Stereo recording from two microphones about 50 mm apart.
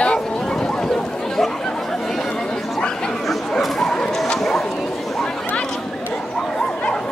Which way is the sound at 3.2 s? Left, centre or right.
Centre.